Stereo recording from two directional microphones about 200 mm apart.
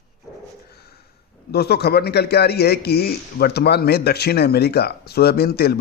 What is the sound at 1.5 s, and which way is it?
A man's voice, 55° left (ahead or behind).